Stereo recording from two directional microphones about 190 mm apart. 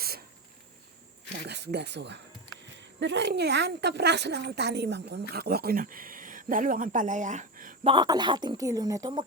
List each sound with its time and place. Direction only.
1.5 s a woman's voice: 60° right (ahead or behind); by 7.8 s 45° right (ahead or behind)
7.9 s speech: 20° right (ahead or behind)